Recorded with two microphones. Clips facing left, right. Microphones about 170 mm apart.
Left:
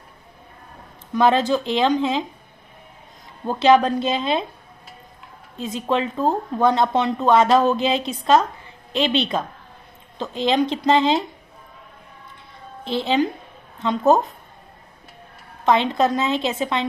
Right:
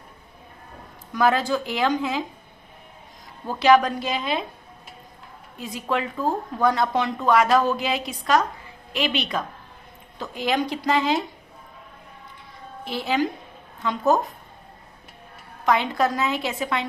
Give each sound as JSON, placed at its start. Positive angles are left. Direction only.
{"t": 1.1, "sound": "speech", "side_deg": 25}
{"t": 3.4, "sound": "speech", "side_deg": 25}
{"t": 5.5, "sound": "speech", "side_deg": 25}
{"t": 12.8, "sound": "a woman's voice", "side_deg": 25}
{"t": 15.6, "sound": "speech", "side_deg": 25}